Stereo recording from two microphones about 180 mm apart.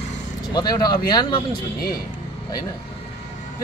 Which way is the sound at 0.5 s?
20° left (ahead or behind).